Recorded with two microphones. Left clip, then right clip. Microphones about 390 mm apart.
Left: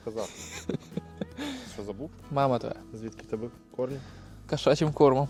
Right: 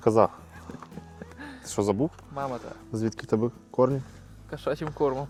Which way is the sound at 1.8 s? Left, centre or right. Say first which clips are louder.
Right 15 dB; right.